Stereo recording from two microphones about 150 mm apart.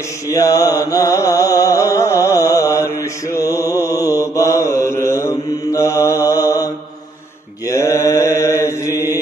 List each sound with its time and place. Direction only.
0.3 s mantra: 20° left (ahead or behind)
7.6 s mantra: 20° left (ahead or behind)